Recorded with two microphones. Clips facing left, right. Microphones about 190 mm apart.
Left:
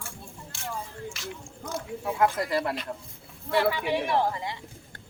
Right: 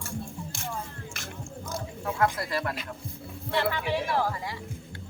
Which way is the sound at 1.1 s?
50° right (ahead or behind).